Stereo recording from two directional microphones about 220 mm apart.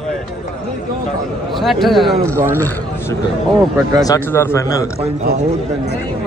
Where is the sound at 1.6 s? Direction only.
Centre (ahead or behind).